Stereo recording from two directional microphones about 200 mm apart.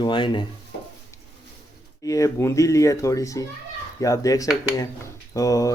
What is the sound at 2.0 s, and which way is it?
Speech, 15° left (ahead or behind).